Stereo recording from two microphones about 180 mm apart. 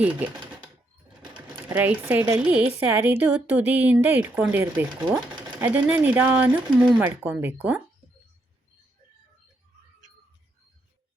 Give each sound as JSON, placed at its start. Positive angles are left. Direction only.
{"t": 1.7, "sound": "speech", "side_deg": -10}